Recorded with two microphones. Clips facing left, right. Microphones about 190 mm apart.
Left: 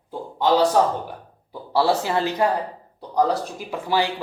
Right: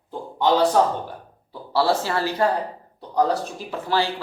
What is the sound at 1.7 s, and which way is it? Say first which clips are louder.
Speech: left 1 dB; 15° left (ahead or behind).